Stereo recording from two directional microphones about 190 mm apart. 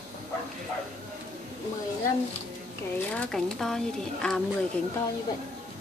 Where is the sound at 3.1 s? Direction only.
5° left (ahead or behind).